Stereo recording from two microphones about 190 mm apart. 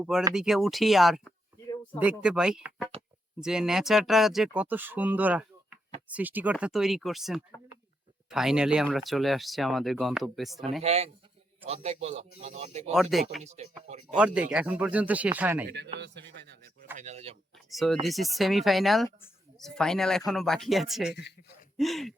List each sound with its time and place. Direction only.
0.0 s speech: 5° right (ahead or behind)
10.8 s speech: 35° right (ahead or behind)
12.9 s speech: centre (ahead or behind)
13.4 s speech: 35° right (ahead or behind)
14.2 s speech: 5° right (ahead or behind)
16.0 s speech: 65° right (ahead or behind)
17.0 s speech: 35° right (ahead or behind)
17.7 s speech: centre (ahead or behind)